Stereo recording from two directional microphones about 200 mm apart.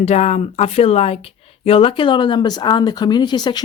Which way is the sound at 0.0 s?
35° left (ahead or behind).